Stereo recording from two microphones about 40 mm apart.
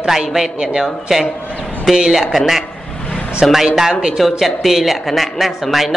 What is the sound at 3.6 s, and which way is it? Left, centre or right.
Speech, centre.